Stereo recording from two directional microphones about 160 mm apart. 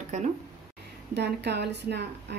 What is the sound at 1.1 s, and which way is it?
Speech, 90° right.